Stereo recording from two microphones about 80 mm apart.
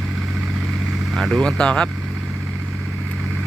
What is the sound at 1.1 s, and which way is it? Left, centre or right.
Speech, centre.